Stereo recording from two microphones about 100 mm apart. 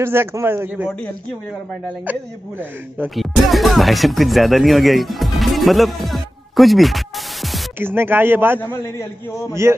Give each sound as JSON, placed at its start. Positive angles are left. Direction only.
{"t": 0.0, "sound": "a man's voice", "side_deg": -25}
{"t": 3.2, "sound": "speech", "side_deg": 0}
{"t": 7.8, "sound": "a man's voice", "side_deg": -20}